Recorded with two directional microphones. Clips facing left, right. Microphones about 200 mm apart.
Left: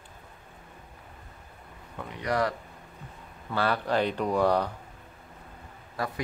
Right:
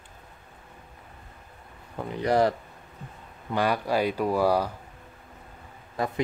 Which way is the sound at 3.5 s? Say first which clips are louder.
Right 2 dB; 10° right (ahead or behind).